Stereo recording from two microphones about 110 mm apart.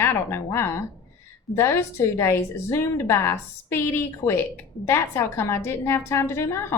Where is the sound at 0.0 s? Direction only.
20° left (ahead or behind).